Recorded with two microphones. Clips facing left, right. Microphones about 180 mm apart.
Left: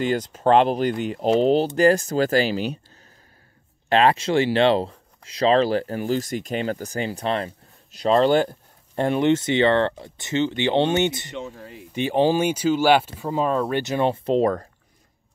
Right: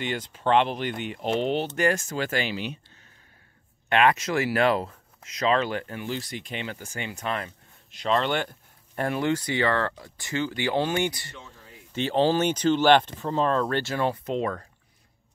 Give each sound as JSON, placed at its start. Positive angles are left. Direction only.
{"t": 0.0, "sound": "speech", "side_deg": 40}
{"t": 11.3, "sound": "speech", "side_deg": 75}
{"t": 11.9, "sound": "speech", "side_deg": 15}